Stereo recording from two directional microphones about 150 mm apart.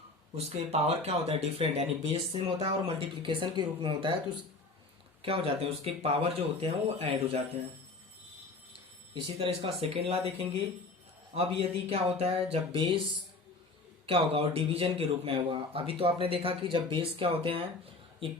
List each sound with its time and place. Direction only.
0.3 s speech: 45° right (ahead or behind)
5.2 s speech: 40° right (ahead or behind)
9.1 s speech: 35° right (ahead or behind)
11.9 s speech: 40° right (ahead or behind)